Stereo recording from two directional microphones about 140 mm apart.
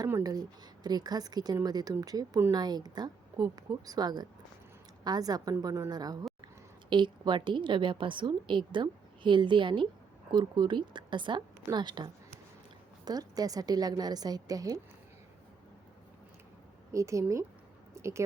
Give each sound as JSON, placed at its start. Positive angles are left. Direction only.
{"t": 0.1, "sound": "a woman's voice", "side_deg": -25}
{"t": 16.9, "sound": "a woman's voice", "side_deg": -20}
{"t": 17.9, "sound": "a sound", "side_deg": -20}